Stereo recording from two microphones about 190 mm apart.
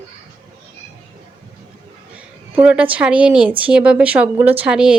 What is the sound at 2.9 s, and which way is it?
Speech, 5° right (ahead or behind).